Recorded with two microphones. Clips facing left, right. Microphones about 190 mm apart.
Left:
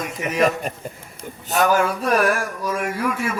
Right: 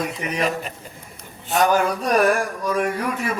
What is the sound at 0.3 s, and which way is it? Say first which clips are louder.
A man's voice: left 6 dB; 45° left (ahead or behind).